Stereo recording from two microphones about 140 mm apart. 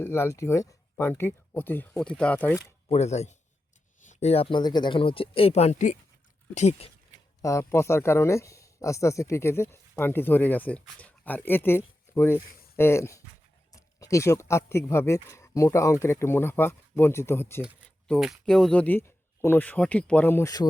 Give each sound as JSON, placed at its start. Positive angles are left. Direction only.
{"t": 0.0, "sound": "speech", "side_deg": 20}
{"t": 2.9, "sound": "speech", "side_deg": 50}
{"t": 7.4, "sound": "speech", "side_deg": 20}
{"t": 18.2, "sound": "speech", "side_deg": 0}